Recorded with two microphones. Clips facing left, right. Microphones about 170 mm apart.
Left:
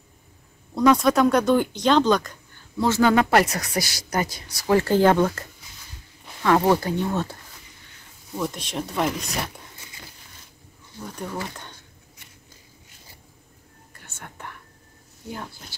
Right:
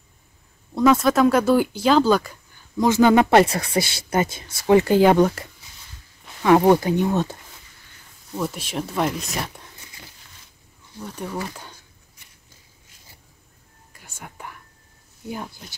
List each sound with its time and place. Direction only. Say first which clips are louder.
0.7 s speech: right 1 dB; centre (ahead or behind); by 7.3 s 20° right (ahead or behind)
8.4 s speech: right 1 dB; 5° right (ahead or behind)
13.9 s whispering: right 2 dB; 10° right (ahead or behind)